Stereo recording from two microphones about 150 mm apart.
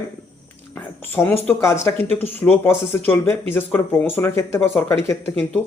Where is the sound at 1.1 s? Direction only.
15° left (ahead or behind).